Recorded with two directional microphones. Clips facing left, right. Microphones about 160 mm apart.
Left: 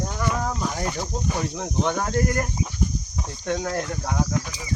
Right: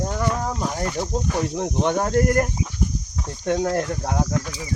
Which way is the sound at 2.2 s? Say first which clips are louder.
Right 5 dB; 45° right (ahead or behind).